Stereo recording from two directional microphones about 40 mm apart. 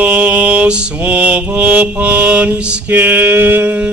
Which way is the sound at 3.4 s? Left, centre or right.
Right.